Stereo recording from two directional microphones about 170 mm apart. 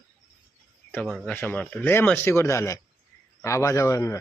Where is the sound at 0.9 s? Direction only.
5° left (ahead or behind).